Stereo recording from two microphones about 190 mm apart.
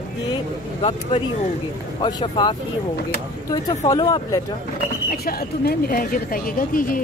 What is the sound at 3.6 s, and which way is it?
Speech, 20° left (ahead or behind).